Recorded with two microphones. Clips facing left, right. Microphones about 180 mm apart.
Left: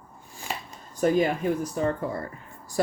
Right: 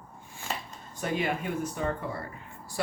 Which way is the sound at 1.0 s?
40° left (ahead or behind).